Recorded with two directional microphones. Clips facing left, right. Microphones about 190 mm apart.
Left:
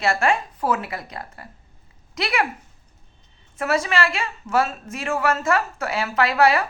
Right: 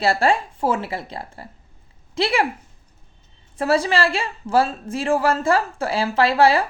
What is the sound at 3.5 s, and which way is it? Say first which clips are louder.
A woman's voice: right 3 dB; 30° right (ahead or behind).